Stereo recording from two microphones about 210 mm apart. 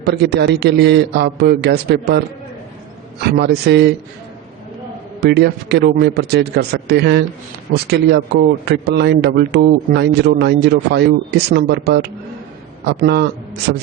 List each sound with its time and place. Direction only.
0.0 s speech: 50° right (ahead or behind)
5.2 s speech: 50° right (ahead or behind)